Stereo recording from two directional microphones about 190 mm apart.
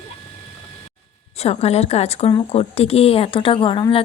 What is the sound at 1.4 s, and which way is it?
A woman's voice, 35° left (ahead or behind).